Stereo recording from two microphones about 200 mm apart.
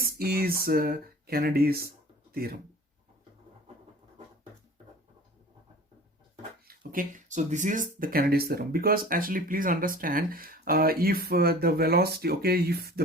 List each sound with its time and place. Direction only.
0.0 s speech: 50° right (ahead or behind)
6.7 s speech: 40° right (ahead or behind)